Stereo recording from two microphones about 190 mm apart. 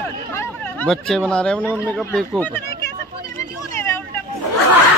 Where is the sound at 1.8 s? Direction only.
Centre (ahead or behind).